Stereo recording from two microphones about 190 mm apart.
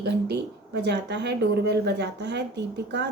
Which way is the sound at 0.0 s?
60° right (ahead or behind).